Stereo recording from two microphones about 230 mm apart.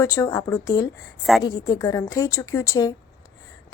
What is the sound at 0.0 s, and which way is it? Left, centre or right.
A woman's voice, centre.